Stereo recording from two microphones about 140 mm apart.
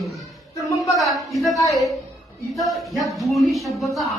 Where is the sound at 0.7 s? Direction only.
25° left (ahead or behind).